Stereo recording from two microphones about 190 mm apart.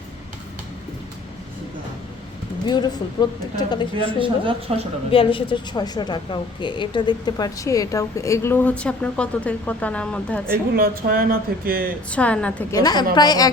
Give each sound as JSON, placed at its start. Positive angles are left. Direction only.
{"t": 2.6, "sound": "speech", "side_deg": 20}
{"t": 4.2, "sound": "speech", "side_deg": -25}
{"t": 5.1, "sound": "a woman's voice", "side_deg": 25}
{"t": 10.8, "sound": "speech", "side_deg": -50}
{"t": 12.1, "sound": "a woman's voice", "side_deg": 5}
{"t": 12.7, "sound": "speech", "side_deg": 20}